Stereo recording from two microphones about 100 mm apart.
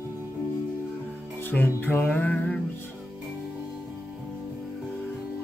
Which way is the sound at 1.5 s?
20° left (ahead or behind).